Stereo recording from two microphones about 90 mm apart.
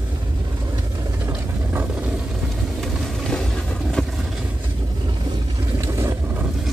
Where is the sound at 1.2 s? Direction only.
25° right (ahead or behind).